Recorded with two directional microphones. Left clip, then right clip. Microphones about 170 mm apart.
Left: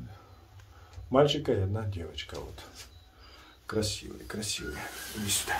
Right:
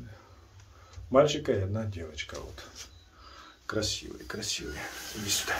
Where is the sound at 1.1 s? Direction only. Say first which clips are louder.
Right 1 dB; 5° right (ahead or behind).